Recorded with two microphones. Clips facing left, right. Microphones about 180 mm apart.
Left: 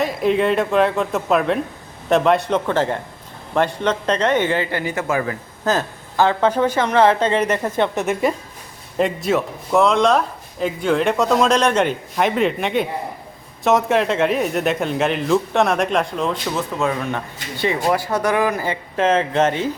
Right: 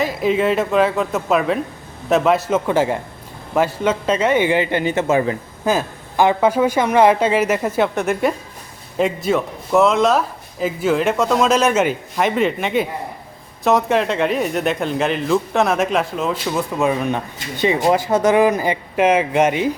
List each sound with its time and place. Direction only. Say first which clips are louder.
0.0 s speech: even; centre (ahead or behind); by 5.4 s 25° right (ahead or behind)
5.6 s speech: right 1 dB; 15° right (ahead or behind)
16.7 s speech: right 5 dB; 15° right (ahead or behind)